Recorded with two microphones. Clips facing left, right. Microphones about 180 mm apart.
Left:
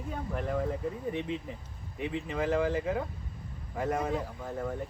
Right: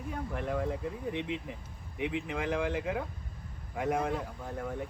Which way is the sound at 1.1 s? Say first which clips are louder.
Even; 75° right (ahead or behind).